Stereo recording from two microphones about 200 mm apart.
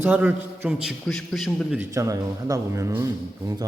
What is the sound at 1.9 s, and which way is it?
A man's voice, 15° right (ahead or behind).